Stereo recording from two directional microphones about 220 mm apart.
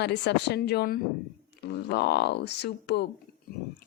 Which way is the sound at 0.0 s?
50° left (ahead or behind).